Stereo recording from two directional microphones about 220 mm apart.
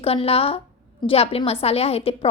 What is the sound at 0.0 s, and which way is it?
A woman's voice, 25° left (ahead or behind).